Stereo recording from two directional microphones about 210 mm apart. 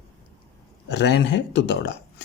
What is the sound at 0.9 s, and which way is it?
Speech, 55° left (ahead or behind).